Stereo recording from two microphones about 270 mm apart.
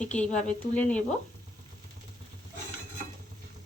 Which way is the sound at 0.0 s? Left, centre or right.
Centre.